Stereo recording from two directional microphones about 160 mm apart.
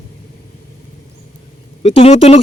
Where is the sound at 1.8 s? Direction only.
40° left (ahead or behind).